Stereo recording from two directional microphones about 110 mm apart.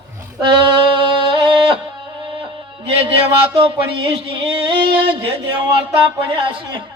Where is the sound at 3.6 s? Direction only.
55° right (ahead or behind).